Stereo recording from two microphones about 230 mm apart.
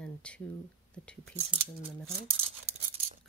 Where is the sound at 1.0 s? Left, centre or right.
Centre.